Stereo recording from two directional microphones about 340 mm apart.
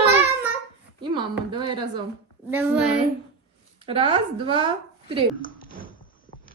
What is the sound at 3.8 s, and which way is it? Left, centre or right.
A woman's voice, centre.